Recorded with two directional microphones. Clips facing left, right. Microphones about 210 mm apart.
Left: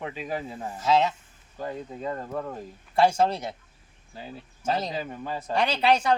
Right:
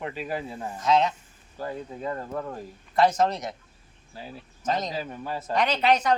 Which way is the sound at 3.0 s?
30° left (ahead or behind).